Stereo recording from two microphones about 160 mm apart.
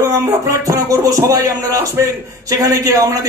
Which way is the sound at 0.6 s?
20° right (ahead or behind).